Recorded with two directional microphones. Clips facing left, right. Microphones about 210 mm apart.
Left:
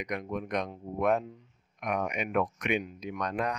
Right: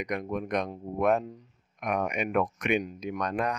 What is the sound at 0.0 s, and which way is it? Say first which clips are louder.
Speech: right 3 dB; 50° right (ahead or behind).